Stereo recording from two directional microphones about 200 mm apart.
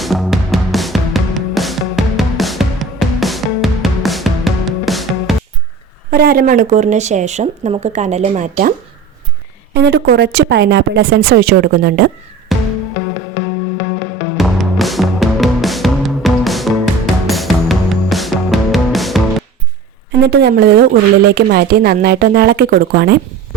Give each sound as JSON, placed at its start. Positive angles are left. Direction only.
{"t": 0.0, "sound": "music", "side_deg": 0}
{"t": 6.1, "sound": "speech", "side_deg": -45}
{"t": 9.7, "sound": "a woman's voice", "side_deg": -55}
{"t": 12.5, "sound": "music", "side_deg": 0}
{"t": 14.3, "sound": "music", "side_deg": 0}
{"t": 20.2, "sound": "a woman's voice", "side_deg": -55}